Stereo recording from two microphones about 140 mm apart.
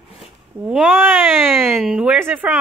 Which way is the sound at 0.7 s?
10° right (ahead or behind).